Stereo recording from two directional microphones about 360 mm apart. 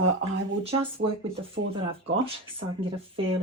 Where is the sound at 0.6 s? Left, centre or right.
Centre.